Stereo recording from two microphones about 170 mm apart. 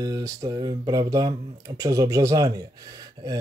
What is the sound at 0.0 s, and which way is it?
Speech, 20° right (ahead or behind).